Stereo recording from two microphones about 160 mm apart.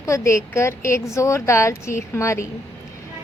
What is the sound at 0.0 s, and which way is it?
Speech, 20° left (ahead or behind).